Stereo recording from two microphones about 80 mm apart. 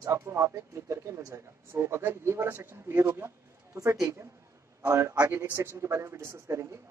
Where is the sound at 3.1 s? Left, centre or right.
Right.